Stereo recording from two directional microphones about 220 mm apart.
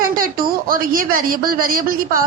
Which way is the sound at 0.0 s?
40° right (ahead or behind).